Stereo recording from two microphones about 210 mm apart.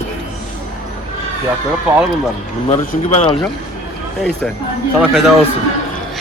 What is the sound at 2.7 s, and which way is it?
Speech, 35° left (ahead or behind).